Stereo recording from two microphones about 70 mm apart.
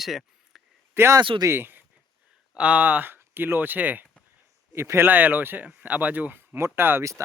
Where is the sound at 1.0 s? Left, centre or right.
Right.